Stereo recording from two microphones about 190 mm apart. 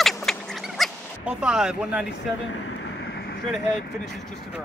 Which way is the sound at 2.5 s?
85° left.